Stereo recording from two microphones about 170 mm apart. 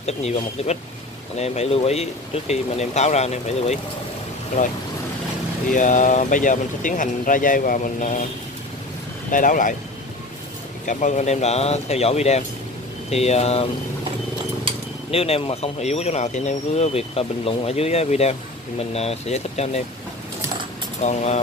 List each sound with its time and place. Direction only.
0.0 s speech: 40° left (ahead or behind)
5.7 s speech: 50° left (ahead or behind)
9.3 s speech: 50° left (ahead or behind)
10.9 s speech: 45° left (ahead or behind)
15.0 s speech: 35° left (ahead or behind)
21.0 s speech: 40° left (ahead or behind)